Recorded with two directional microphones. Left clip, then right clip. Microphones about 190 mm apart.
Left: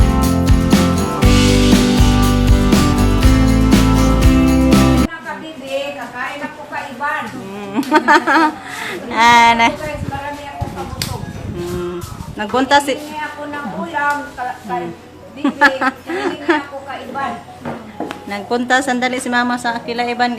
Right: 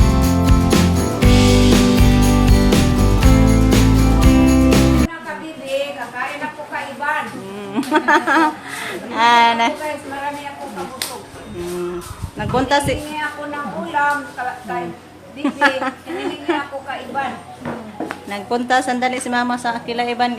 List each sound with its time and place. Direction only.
0.1 s music: centre (ahead or behind)
7.7 s a woman's voice: 5° left (ahead or behind)
12.4 s a woman's voice: 10° left (ahead or behind)
14.0 s a woman's voice: 10° right (ahead or behind)
15.4 s a woman's voice: 15° left (ahead or behind)
18.3 s a woman's voice: 10° left (ahead or behind)